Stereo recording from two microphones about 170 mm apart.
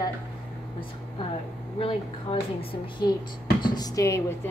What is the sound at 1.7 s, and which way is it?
A woman's voice, 35° left (ahead or behind).